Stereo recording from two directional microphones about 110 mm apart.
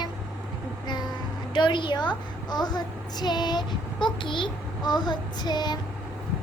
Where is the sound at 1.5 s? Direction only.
45° left (ahead or behind).